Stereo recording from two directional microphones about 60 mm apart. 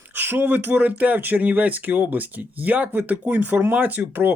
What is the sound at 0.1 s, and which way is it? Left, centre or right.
Speech, right.